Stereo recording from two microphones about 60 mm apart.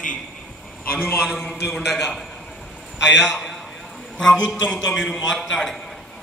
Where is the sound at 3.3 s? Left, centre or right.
Centre.